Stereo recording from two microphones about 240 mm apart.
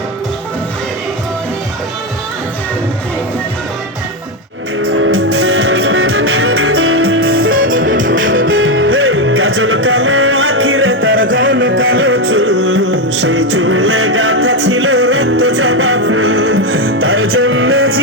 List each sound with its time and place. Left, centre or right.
4.9 s music: right